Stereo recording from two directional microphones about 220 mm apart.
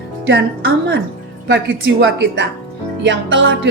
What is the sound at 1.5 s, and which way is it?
A woman's voice, 55° right (ahead or behind).